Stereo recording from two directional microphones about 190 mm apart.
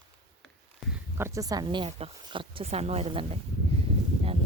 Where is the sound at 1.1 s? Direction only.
15° right (ahead or behind); by 3.3 s 30° right (ahead or behind).